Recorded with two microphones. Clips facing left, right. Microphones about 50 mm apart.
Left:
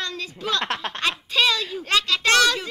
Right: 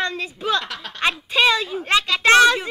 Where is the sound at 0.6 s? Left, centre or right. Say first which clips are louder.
Left 5 dB; left.